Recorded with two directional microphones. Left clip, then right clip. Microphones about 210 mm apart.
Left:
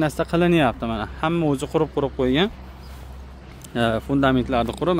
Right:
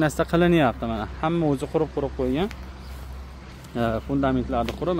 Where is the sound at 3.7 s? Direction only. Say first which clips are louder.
Left 4 dB; 15° left (ahead or behind).